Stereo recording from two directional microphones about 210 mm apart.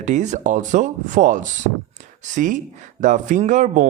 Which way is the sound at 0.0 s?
35° right (ahead or behind).